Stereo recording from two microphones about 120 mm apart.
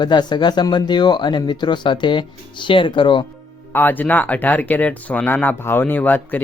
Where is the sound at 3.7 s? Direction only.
15° left (ahead or behind).